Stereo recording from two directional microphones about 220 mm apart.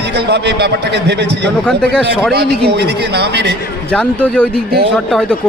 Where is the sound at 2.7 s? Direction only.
50° right (ahead or behind).